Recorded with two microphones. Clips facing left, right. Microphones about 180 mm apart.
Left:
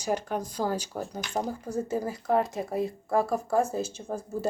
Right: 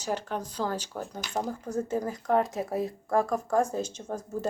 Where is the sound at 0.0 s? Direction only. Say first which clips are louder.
Left 2 dB; 10° left (ahead or behind).